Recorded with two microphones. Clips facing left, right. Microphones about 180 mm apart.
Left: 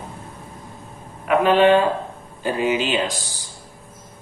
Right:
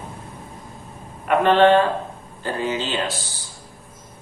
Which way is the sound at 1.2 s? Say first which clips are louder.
Even; 5° left (ahead or behind).